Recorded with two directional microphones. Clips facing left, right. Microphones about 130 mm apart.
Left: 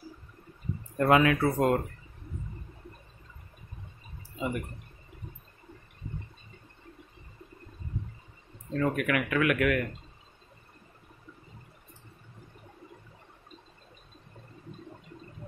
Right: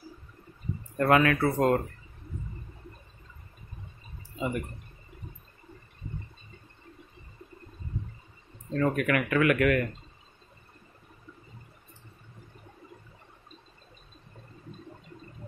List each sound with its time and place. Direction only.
0.9 s speech: 15° left (ahead or behind)
4.4 s speech: 10° left (ahead or behind)
8.7 s speech: 5° left (ahead or behind)